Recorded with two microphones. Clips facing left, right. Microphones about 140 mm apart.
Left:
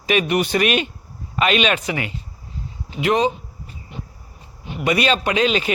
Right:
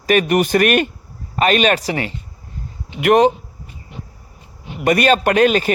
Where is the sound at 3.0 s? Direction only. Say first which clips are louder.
Right 6 dB; 60° right (ahead or behind).